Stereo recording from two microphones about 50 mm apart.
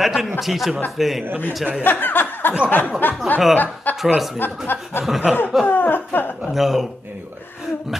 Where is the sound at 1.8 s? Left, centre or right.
Left.